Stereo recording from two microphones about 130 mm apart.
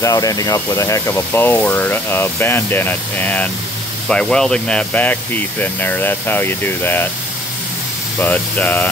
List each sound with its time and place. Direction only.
0.0 s speech: 25° left (ahead or behind)
8.2 s speech: 15° left (ahead or behind)